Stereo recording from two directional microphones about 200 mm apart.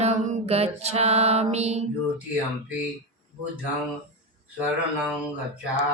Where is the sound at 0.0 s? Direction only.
35° right (ahead or behind).